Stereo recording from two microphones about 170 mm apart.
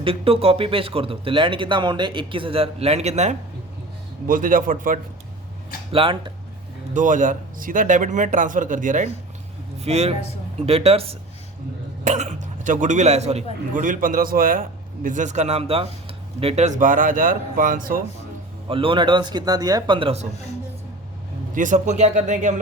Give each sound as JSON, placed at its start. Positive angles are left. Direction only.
{"t": 0.0, "sound": "speech", "side_deg": -35}
{"t": 4.3, "sound": "speech", "side_deg": -55}
{"t": 5.9, "sound": "speech", "side_deg": -30}
{"t": 6.9, "sound": "speech", "side_deg": -50}
{"t": 9.8, "sound": "a man's voice", "side_deg": -40}
{"t": 18.7, "sound": "speech", "side_deg": -30}
{"t": 21.5, "sound": "speech", "side_deg": -50}